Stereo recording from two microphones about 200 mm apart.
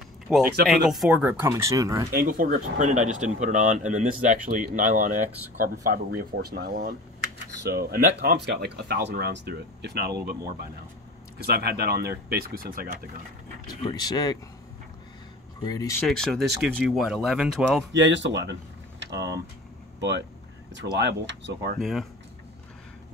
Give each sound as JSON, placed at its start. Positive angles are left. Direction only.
{"t": 0.3, "sound": "speech", "side_deg": 0}
{"t": 2.1, "sound": "speech", "side_deg": -45}
{"t": 13.7, "sound": "speech", "side_deg": 20}
{"t": 15.6, "sound": "speech", "side_deg": 20}
{"t": 16.1, "sound": "speech", "side_deg": 0}
{"t": 17.9, "sound": "speech", "side_deg": -65}
{"t": 21.7, "sound": "speech", "side_deg": 0}